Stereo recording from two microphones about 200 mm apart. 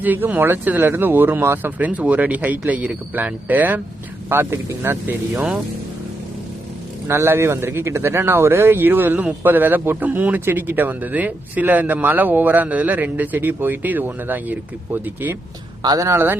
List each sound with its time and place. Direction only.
0.0 s speech: 10° right (ahead or behind)
7.1 s speech: 15° right (ahead or behind)